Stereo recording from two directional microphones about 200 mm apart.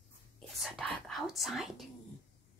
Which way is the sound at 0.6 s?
Centre (ahead or behind).